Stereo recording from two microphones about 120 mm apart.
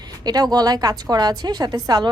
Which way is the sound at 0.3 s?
35° right (ahead or behind).